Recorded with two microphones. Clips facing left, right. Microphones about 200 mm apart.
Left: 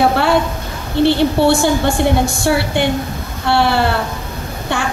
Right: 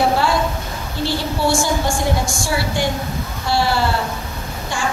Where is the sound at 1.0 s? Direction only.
60° left (ahead or behind).